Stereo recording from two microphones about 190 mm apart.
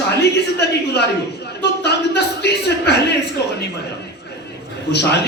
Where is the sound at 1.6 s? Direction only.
60° left (ahead or behind).